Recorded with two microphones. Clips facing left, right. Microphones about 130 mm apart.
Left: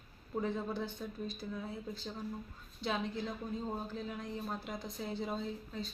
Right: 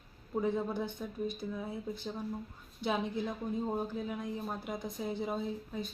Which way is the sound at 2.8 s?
15° right (ahead or behind).